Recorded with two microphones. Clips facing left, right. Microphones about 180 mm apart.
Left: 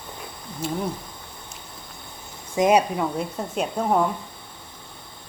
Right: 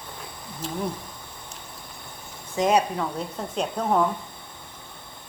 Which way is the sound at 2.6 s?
10° left (ahead or behind).